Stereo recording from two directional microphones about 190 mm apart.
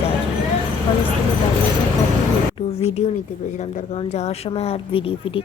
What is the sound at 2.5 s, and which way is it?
Speech, 30° left (ahead or behind).